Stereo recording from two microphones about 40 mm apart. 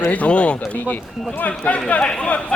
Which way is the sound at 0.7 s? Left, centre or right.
Left.